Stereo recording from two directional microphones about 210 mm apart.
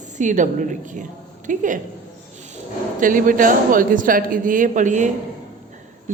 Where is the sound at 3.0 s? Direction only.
40° right (ahead or behind).